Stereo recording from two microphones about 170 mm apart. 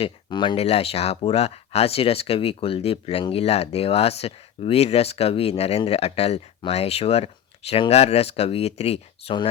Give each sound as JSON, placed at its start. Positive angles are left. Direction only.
{"t": 0.0, "sound": "speech", "side_deg": 25}